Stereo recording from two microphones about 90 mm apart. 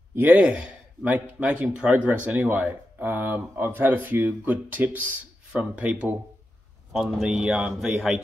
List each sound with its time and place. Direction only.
0.1 s speech: 20° right (ahead or behind)